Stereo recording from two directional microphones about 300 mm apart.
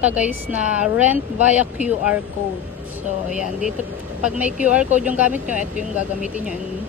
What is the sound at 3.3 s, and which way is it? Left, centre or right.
Speech, left.